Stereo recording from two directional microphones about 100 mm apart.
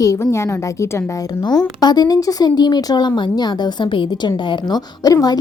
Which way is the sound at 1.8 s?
45° left (ahead or behind).